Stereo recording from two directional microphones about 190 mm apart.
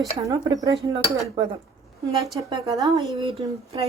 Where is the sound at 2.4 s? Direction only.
20° right (ahead or behind).